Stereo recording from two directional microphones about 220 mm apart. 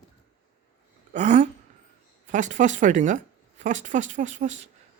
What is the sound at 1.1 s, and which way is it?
Speech, 35° right (ahead or behind).